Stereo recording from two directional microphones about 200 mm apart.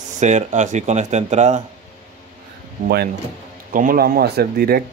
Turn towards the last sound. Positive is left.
turn(degrees=-50)  # may be behind; listen again after turning